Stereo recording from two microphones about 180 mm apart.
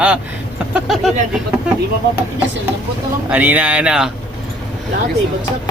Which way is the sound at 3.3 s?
10° right (ahead or behind).